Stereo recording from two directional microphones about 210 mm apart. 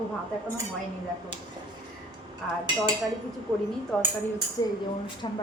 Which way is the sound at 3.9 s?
5° left (ahead or behind).